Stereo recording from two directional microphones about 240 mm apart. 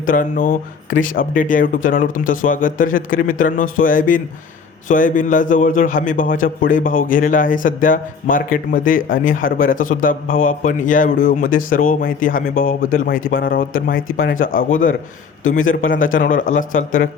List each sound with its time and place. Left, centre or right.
0.0 s a man's voice: left